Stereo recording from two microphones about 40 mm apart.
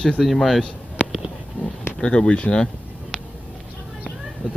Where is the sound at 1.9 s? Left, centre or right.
Left.